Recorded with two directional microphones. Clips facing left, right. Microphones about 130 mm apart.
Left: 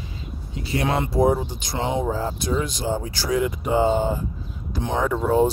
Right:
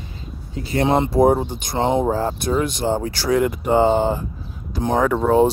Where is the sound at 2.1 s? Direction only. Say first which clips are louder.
Right 4 dB; 60° right (ahead or behind); by 4.2 s 75° right (ahead or behind).